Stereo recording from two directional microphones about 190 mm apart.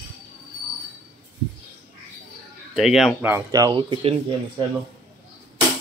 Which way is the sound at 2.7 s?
Centre (ahead or behind).